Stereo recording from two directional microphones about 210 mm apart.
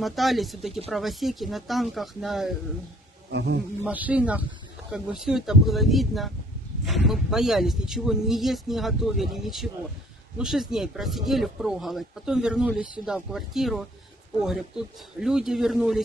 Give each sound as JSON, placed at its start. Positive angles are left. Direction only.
{"t": 0.0, "sound": "speech", "side_deg": 0}
{"t": 3.3, "sound": "a man's voice", "side_deg": -55}
{"t": 3.8, "sound": "speech", "side_deg": -5}